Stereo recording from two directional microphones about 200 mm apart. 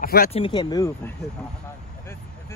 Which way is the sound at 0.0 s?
45° left (ahead or behind).